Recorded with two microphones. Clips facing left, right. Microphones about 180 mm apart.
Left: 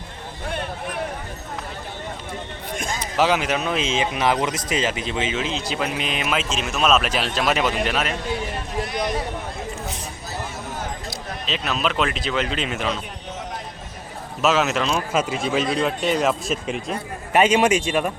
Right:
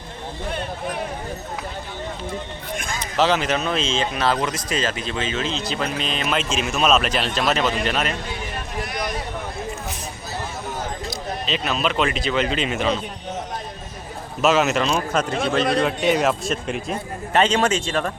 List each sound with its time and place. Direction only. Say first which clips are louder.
2.7 s a sound: left 2 dB; 40° left (ahead or behind)
3.0 s speech: right 1 dB; 10° left (ahead or behind)
8.9 s a sound: left 3 dB; 25° left (ahead or behind)
11.1 s speech: right 3 dB; centre (ahead or behind)
14.4 s speech: right 2 dB; centre (ahead or behind)
17.3 s speech: left 2 dB; 10° left (ahead or behind)